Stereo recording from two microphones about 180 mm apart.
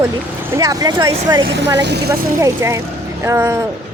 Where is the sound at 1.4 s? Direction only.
75° right (ahead or behind).